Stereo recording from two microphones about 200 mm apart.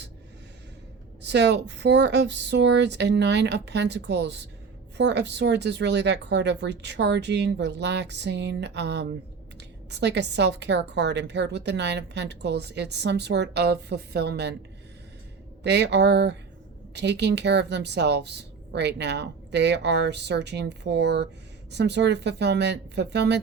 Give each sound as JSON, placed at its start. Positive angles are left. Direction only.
{"t": 1.2, "sound": "a woman's voice", "side_deg": -60}
{"t": 15.6, "sound": "a woman's voice", "side_deg": -60}